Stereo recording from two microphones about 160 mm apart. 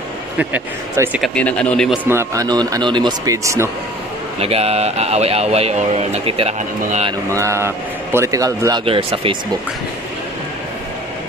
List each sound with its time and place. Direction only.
0.4 s speech: 10° right (ahead or behind)
1.2 s speech: 5° left (ahead or behind)
2.0 s speech: 20° right (ahead or behind)
4.4 s speech: 40° right (ahead or behind)
7.2 s speech: 20° right (ahead or behind)
8.8 s speech: 35° right (ahead or behind)